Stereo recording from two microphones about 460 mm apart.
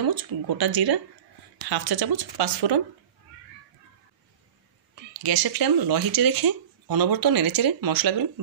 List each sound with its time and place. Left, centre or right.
0.0 s speech: right
5.1 s speech: right